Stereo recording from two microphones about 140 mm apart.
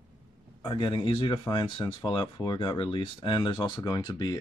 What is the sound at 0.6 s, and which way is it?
Speech, 35° left (ahead or behind).